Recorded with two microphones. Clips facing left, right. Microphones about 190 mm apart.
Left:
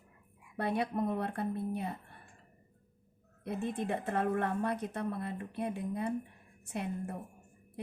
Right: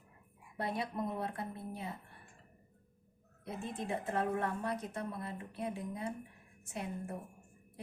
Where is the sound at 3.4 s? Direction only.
60° left (ahead or behind).